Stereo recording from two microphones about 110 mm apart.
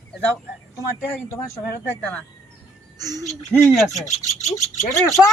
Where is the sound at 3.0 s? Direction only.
35° right (ahead or behind).